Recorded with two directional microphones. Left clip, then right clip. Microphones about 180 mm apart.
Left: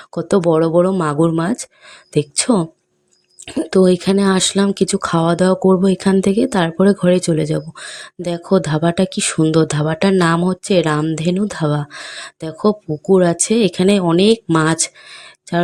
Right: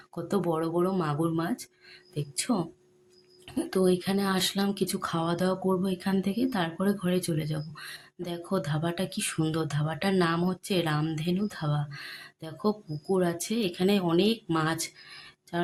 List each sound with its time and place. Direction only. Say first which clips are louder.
0.1 s speech: left 15 dB; 40° left (ahead or behind)